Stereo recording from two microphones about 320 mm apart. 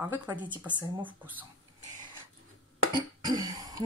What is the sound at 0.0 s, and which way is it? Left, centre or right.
Speech, centre.